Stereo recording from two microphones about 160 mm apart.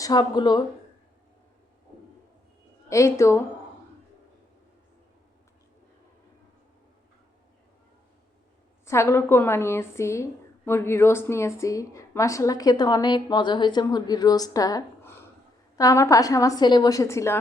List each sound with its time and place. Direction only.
0.0 s speech: 25° left (ahead or behind)
2.9 s speech: 20° left (ahead or behind)
8.9 s a woman's voice: 15° left (ahead or behind)